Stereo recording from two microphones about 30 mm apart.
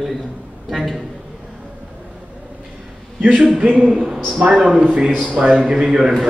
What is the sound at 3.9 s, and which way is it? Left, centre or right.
Speech, right.